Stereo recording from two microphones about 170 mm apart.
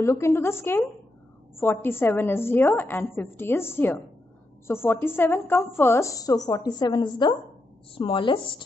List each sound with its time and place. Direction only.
0.0 s a woman's voice: 15° left (ahead or behind)